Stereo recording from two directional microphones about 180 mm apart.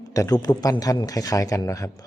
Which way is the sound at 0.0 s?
20° left (ahead or behind).